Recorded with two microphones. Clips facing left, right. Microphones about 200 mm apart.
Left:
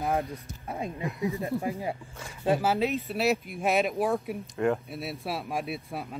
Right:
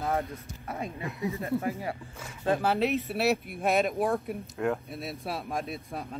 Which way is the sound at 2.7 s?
Centre (ahead or behind).